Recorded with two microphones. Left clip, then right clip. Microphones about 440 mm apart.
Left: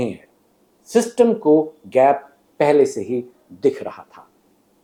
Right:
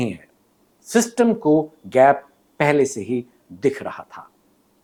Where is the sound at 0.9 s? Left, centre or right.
Right.